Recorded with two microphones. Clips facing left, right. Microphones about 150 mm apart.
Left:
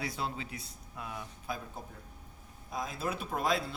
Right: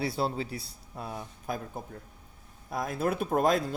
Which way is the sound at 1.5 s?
50° right (ahead or behind).